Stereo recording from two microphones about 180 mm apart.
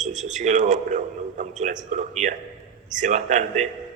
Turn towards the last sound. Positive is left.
turn(degrees=-40)  # may be behind; listen again after turning